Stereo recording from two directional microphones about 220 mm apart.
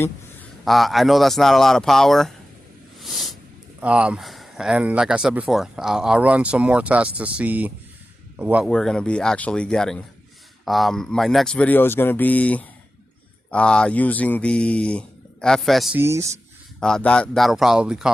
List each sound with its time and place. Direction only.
0.6 s speech: centre (ahead or behind)
3.0 s a sound: centre (ahead or behind)
3.8 s speech: 5° right (ahead or behind)
16.8 s speech: 5° left (ahead or behind)